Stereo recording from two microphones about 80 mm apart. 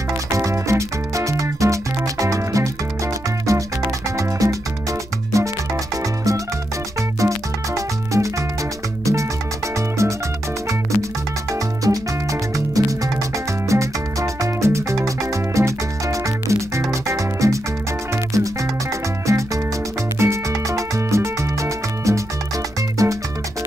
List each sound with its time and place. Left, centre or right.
0.3 s music: right
4.2 s music: right
7.0 s music: right
9.8 s music: right
11.5 s music: right